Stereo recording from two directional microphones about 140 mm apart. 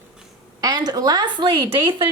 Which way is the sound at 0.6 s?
30° right (ahead or behind).